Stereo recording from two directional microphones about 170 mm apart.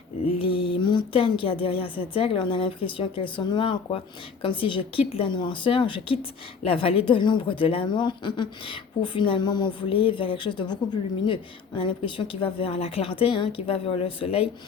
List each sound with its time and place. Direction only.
0.3 s a woman's voice: 30° left (ahead or behind)